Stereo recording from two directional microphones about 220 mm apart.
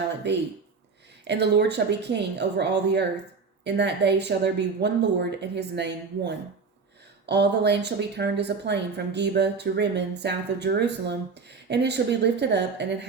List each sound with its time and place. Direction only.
1.2 s a woman's voice: 50° right (ahead or behind)